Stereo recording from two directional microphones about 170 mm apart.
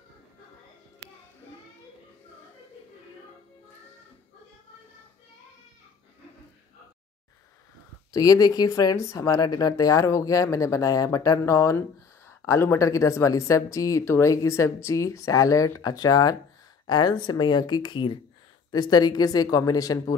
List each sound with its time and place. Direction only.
8.1 s speech: 20° left (ahead or behind)